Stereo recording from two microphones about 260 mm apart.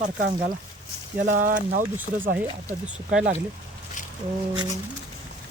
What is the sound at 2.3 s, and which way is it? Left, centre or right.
Speech, centre.